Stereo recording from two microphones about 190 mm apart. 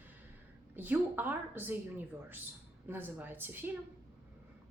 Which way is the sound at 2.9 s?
10° right (ahead or behind).